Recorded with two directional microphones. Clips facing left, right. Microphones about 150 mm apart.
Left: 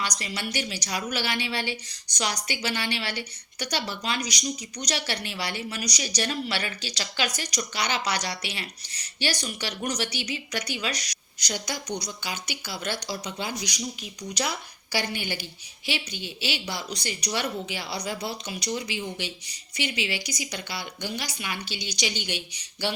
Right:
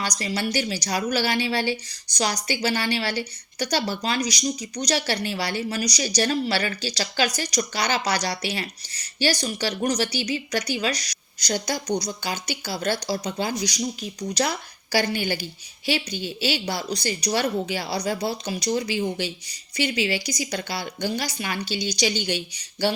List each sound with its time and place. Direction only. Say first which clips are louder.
0.0 s a woman's voice: right 5 dB; 35° right (ahead or behind)